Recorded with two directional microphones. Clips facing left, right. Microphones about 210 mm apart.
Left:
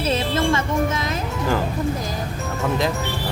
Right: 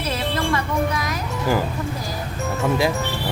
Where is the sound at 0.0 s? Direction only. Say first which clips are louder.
Left 3 dB; 25° left (ahead or behind).